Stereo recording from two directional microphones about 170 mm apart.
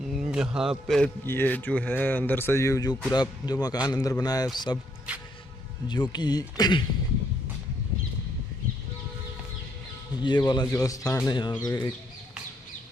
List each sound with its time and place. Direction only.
0.0 s a man's voice: 5° right (ahead or behind); by 4.8 s 25° left (ahead or behind)
5.1 s a sound: 5° right (ahead or behind)
5.9 s speech: 25° left (ahead or behind)
10.2 s speech: 25° left (ahead or behind)